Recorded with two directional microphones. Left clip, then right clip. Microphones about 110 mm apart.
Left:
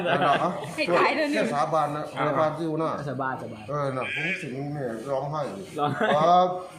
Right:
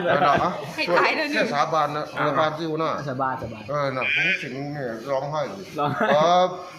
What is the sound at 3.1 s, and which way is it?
Speech, 40° right (ahead or behind).